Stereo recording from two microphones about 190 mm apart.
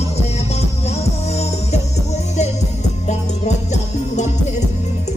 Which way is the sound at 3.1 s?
35° left (ahead or behind).